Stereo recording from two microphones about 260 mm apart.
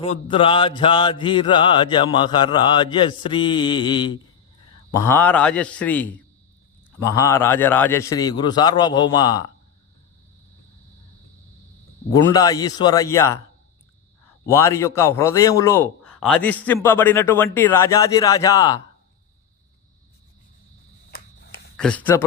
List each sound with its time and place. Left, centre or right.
0.0 s mantra: left
4.9 s a man's voice: centre
12.3 s a man's voice: centre
14.4 s a man's voice: centre
21.1 s a sound: left
21.8 s speech: centre